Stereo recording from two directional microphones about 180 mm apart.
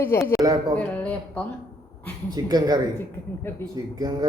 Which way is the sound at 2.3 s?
20° right (ahead or behind).